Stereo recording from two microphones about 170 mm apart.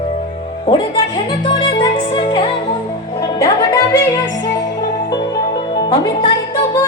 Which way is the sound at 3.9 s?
20° left (ahead or behind).